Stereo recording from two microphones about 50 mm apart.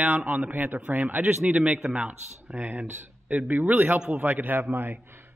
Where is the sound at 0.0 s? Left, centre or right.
Right.